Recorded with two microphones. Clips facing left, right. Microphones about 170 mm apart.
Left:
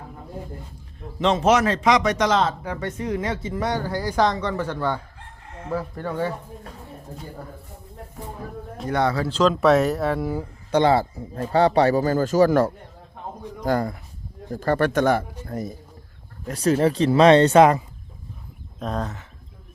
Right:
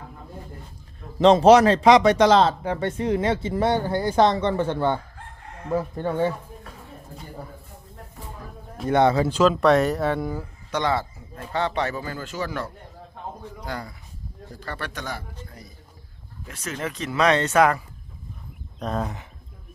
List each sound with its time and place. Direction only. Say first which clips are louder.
1.2 s speech: right 5 dB; 35° right (ahead or behind)
8.9 s speech: right 4 dB; 20° right (ahead or behind)
9.4 s speech: left 1 dB; centre (ahead or behind)
10.7 s speech: left 6 dB; 30° left (ahead or behind); by 15.7 s 50° left (ahead or behind)
16.5 s speech: left 12 dB; 35° left (ahead or behind)
18.8 s speech: even; centre (ahead or behind)